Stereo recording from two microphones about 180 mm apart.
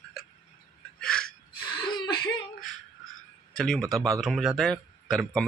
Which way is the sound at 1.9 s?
25° left (ahead or behind).